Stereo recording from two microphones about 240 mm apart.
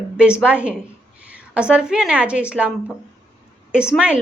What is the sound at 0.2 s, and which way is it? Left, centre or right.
A woman's voice, centre.